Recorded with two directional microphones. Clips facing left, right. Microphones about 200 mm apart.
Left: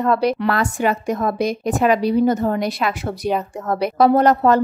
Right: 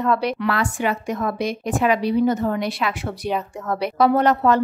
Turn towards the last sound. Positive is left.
turn(degrees=40)  # may be behind; listen again after turning